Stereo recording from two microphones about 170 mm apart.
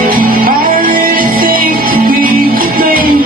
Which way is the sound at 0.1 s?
55° right (ahead or behind).